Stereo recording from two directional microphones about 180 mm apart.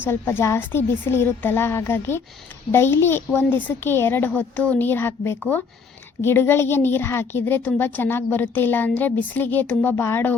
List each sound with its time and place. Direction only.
0.0 s speech: 15° left (ahead or behind)